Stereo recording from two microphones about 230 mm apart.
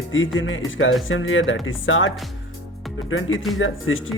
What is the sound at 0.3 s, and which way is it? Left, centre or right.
Speech, left.